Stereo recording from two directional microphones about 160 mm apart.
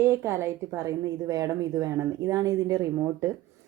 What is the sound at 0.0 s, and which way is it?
A woman's voice, 15° right (ahead or behind).